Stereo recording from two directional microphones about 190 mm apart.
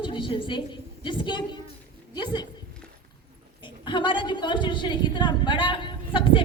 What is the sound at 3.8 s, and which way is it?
A woman's voice, 25° left (ahead or behind).